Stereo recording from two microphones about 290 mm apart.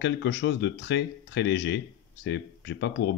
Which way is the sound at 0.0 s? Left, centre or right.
Left.